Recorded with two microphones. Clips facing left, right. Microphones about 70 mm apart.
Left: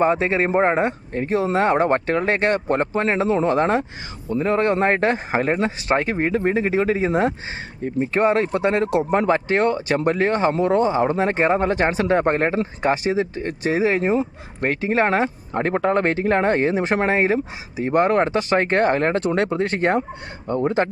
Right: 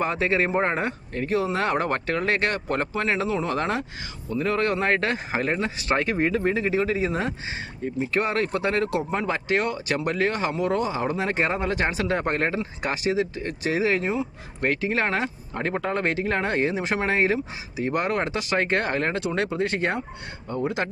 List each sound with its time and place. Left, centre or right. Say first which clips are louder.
0.0 s speech: left 5 dB; left
9.1 s speech: left 7 dB; left